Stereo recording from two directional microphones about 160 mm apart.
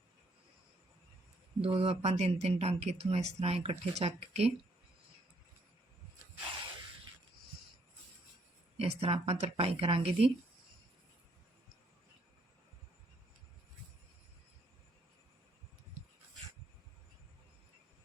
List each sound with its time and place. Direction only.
1.6 s speech: 40° right (ahead or behind)
8.8 s speech: 40° right (ahead or behind)